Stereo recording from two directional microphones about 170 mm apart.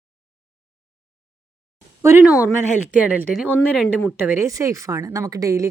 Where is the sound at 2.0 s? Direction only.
15° right (ahead or behind).